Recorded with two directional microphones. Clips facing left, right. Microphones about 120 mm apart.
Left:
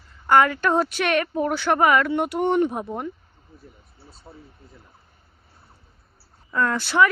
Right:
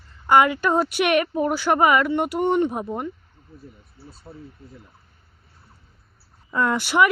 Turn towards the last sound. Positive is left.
turn(degrees=-15)  # may be behind; listen again after turning